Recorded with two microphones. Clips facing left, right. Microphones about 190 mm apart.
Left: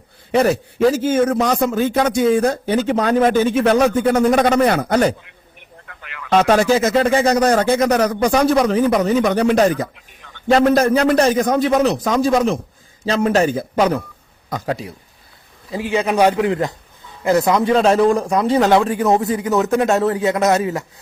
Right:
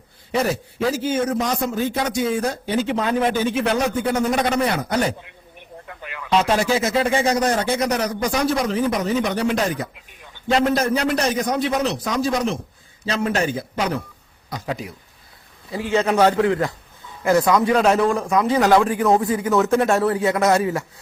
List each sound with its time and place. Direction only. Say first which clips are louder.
0.3 s speech: left 6 dB; 65° left (ahead or behind)
1.0 s a man's voice: left 5 dB; 50° left (ahead or behind)
5.9 s a sound: right 2 dB; 20° right (ahead or behind)
6.6 s a man's voice: left 5 dB; 45° left (ahead or behind)
15.7 s a man's voice: left 1 dB; 15° left (ahead or behind)